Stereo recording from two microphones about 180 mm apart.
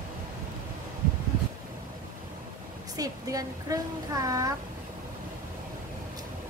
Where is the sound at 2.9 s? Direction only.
20° right (ahead or behind).